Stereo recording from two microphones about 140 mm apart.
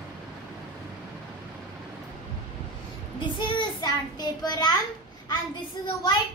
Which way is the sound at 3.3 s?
30° left (ahead or behind).